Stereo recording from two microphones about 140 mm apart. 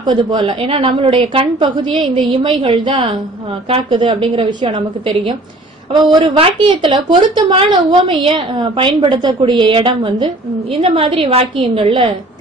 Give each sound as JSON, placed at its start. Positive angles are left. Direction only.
{"t": 0.0, "sound": "a woman's voice", "side_deg": -30}
{"t": 0.7, "sound": "a woman's voice", "side_deg": -40}